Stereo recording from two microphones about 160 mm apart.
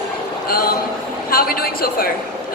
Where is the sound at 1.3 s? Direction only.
65° left (ahead or behind).